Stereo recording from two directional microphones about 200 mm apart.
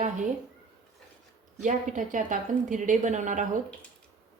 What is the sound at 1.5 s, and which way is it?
A woman's voice, 35° right (ahead or behind).